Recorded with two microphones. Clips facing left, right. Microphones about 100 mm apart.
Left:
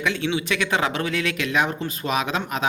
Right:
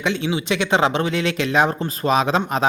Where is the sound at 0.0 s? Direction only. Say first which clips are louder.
Right 2 dB; 20° right (ahead or behind).